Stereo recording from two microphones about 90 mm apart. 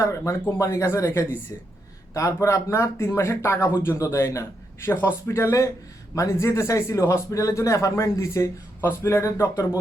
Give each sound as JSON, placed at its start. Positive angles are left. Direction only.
{"t": 0.0, "sound": "speech", "side_deg": 35}